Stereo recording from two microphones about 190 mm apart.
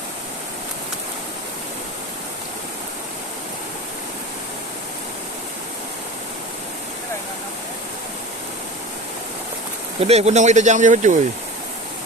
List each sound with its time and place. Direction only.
10.0 s speech: 35° right (ahead or behind)